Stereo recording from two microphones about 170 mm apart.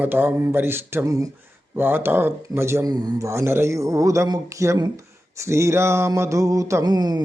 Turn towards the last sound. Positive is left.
turn(degrees=-25)  # may be behind; listen again after turning